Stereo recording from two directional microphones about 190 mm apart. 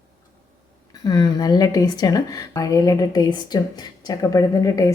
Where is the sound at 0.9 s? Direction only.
20° left (ahead or behind).